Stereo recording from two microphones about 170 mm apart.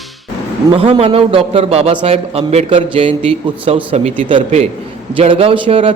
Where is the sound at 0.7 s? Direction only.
35° right (ahead or behind).